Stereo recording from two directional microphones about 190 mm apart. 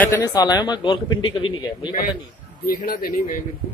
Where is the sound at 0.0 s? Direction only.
20° left (ahead or behind).